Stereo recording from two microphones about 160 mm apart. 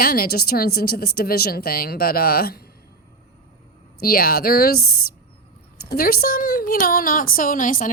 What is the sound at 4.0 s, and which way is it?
A woman's voice, 65° left (ahead or behind).